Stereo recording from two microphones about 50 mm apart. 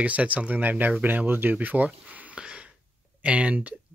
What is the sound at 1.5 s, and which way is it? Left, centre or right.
Speech, right.